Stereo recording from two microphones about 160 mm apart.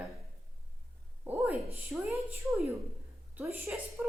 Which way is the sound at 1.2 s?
10° right (ahead or behind).